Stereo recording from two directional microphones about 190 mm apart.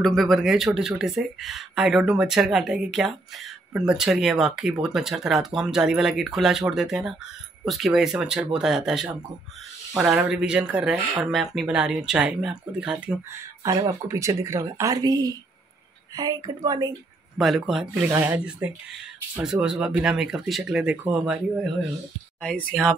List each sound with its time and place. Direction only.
0.0 s speech: centre (ahead or behind)
13.7 s speech: 15° right (ahead or behind)
17.4 s speech: centre (ahead or behind)
22.4 s speech: 5° left (ahead or behind)